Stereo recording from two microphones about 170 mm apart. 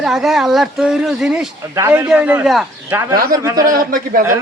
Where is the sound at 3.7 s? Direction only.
55° right (ahead or behind).